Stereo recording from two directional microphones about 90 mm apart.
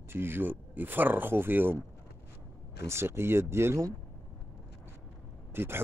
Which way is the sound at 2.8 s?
30° right (ahead or behind).